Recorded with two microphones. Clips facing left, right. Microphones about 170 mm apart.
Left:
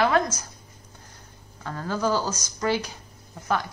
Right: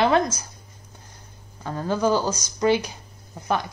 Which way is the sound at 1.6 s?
20° right (ahead or behind).